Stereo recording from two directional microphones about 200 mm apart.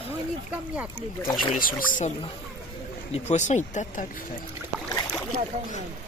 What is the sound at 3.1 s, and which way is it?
Speech, 35° left (ahead or behind).